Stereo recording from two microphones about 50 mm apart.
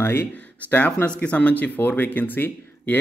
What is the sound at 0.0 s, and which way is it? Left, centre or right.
Speech, left.